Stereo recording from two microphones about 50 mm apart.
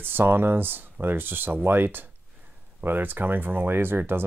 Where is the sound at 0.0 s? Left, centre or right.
Right.